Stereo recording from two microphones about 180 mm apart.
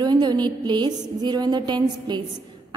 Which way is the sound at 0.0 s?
25° right (ahead or behind).